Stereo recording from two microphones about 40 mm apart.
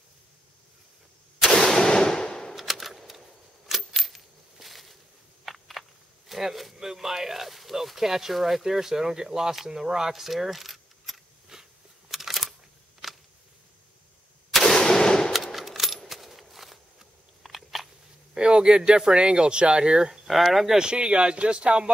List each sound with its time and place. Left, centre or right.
1.4 s gunshot: centre
2.5 s a sound: centre
5.4 s speech: centre
12.1 s camera: centre
13.0 s a sound: centre
14.5 s gunshot: centre
14.8 s gunshot: centre
15.3 s coin: centre
18.3 s speech: right
20.2 s speech: centre
20.7 s speech: right